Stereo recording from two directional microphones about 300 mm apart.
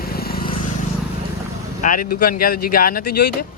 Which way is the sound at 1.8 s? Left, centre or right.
Left.